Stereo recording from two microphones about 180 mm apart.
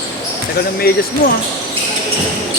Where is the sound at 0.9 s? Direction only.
55° left (ahead or behind).